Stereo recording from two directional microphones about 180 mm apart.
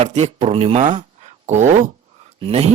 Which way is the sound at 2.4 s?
30° right (ahead or behind).